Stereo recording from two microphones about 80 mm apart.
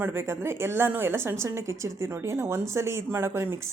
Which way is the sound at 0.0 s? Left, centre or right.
Right.